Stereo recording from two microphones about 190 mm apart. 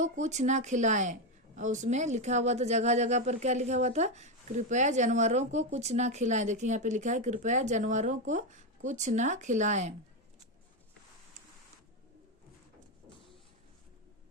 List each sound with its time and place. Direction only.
0.0 s speech: 40° right (ahead or behind)